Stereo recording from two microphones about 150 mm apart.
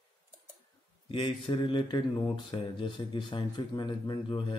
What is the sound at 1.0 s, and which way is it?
Speech, 35° left (ahead or behind).